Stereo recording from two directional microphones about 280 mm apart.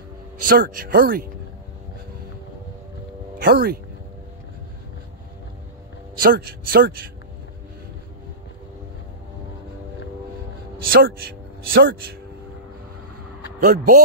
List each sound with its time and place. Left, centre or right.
0.4 s speech: right
3.3 s speech: right
6.2 s speech: right
10.9 s speech: right
13.6 s speech: right